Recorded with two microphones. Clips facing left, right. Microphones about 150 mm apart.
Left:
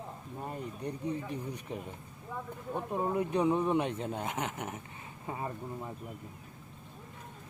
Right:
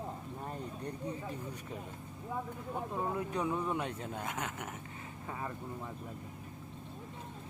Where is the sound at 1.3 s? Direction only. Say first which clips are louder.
Left 4 dB; 20° left (ahead or behind).